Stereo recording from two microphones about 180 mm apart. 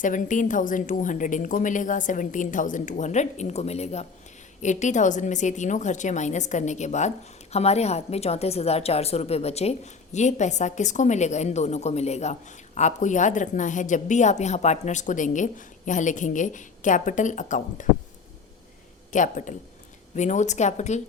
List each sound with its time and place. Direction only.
0.0 s a woman's voice: 45° left (ahead or behind)
19.1 s a woman's voice: 45° left (ahead or behind)